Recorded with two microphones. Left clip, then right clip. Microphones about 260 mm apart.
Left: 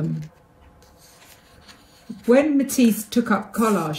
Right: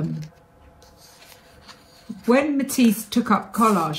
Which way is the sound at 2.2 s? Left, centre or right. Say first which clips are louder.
Left 2 dB; right.